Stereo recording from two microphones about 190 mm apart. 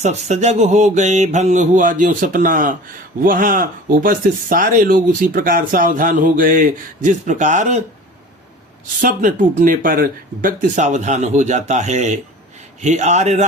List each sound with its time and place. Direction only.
0.0 s speech: 35° right (ahead or behind)
9.0 s speech: 45° right (ahead or behind)